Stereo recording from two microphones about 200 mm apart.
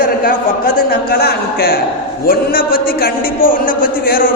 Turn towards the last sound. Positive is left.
turn(degrees=45)  # may be behind; listen again after turning